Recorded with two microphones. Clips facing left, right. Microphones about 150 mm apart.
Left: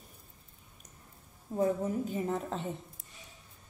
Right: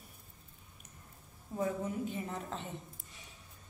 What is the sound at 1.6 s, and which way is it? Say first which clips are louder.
A woman's voice: left 5 dB; 40° left (ahead or behind).